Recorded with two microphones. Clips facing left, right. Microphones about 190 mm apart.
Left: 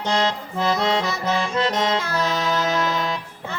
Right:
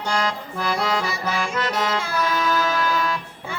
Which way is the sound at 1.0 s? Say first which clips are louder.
Left 1 dB; 10° right (ahead or behind).